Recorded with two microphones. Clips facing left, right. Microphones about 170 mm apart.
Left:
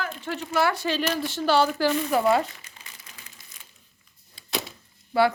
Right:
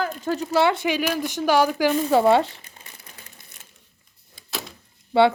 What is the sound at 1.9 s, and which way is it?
Speech, 30° right (ahead or behind).